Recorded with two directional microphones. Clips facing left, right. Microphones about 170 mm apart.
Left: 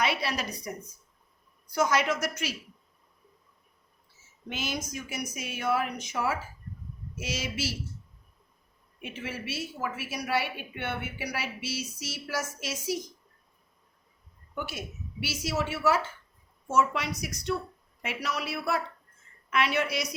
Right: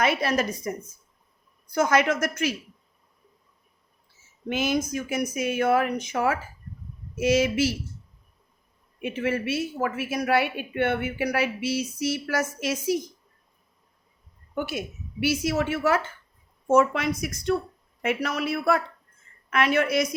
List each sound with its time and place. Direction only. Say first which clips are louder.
0.0 s a woman's voice: right 6 dB; 50° right (ahead or behind)
1.7 s a woman's voice: right 4 dB; 55° right (ahead or behind)
4.4 s a woman's voice: right 10 dB; 50° right (ahead or behind)
9.0 s a woman's voice: right 11 dB; 60° right (ahead or behind)
14.5 s a woman's voice: right 7 dB; 55° right (ahead or behind)